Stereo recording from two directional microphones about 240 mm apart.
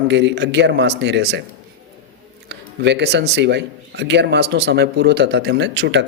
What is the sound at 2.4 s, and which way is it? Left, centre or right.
Speech, right.